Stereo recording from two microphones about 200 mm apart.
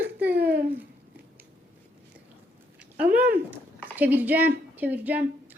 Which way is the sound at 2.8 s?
5° right (ahead or behind).